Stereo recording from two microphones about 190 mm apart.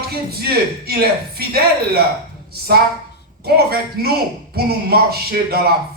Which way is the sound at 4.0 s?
55° right (ahead or behind).